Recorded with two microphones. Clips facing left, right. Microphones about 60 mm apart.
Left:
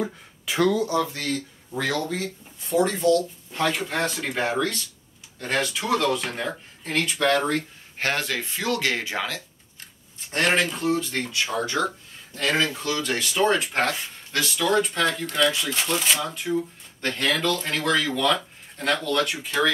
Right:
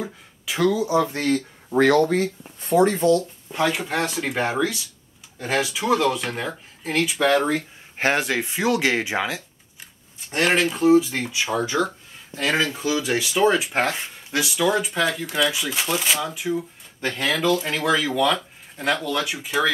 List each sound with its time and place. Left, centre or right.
0.0 s speech: centre
0.8 s speech: centre
1.1 s speech: right
1.8 s speech: right
3.5 s speech: centre
8.0 s speech: centre
10.3 s speech: centre